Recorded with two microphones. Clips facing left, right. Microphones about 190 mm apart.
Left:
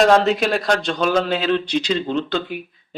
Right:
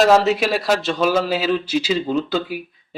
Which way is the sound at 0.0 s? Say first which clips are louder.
Even; centre (ahead or behind).